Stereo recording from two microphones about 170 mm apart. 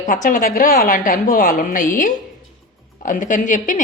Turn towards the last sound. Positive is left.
turn(degrees=50)  # may be behind; listen again after turning